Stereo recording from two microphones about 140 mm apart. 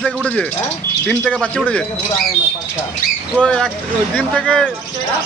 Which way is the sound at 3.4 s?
5° left (ahead or behind).